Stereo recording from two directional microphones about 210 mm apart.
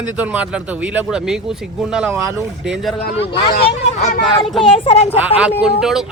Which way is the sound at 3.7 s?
30° left (ahead or behind).